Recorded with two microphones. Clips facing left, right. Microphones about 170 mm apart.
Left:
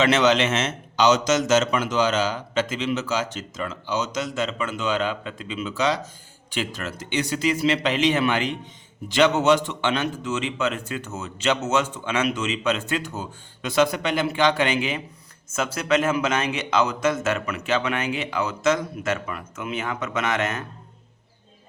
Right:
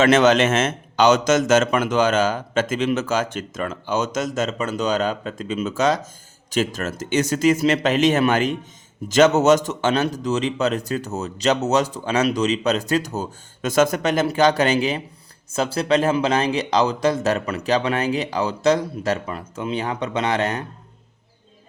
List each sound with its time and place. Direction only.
0.0 s a man's voice: 50° right (ahead or behind)